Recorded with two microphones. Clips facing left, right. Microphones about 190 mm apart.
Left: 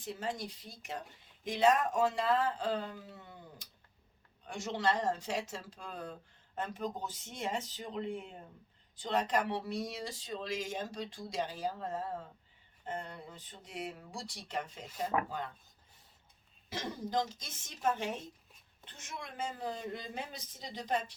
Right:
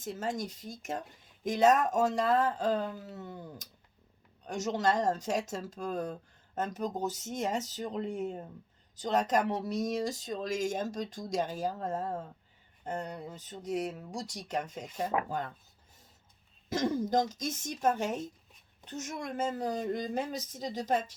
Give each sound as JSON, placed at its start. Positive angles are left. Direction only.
{"t": 0.0, "sound": "speech", "side_deg": -45}
{"t": 16.6, "sound": "speech", "side_deg": -45}